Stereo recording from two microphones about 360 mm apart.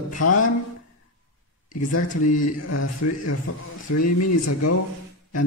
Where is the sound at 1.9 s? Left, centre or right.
Left.